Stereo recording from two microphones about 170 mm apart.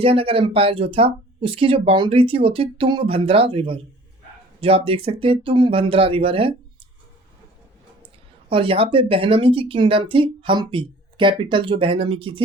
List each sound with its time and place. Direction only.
0.0 s a woman's voice: 30° right (ahead or behind)
8.0 s a woman's voice: 30° right (ahead or behind)